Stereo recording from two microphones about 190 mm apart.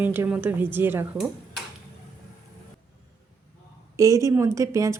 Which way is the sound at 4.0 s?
15° right (ahead or behind).